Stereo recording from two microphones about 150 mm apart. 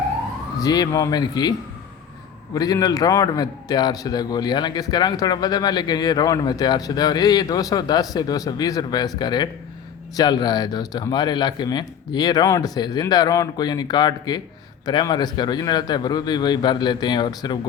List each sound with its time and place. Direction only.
0.6 s a man's voice: 25° left (ahead or behind)